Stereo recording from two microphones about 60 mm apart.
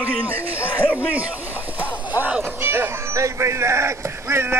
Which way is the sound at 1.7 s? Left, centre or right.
Right.